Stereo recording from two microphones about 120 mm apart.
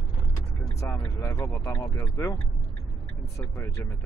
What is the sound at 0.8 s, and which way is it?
Speech, 25° left (ahead or behind).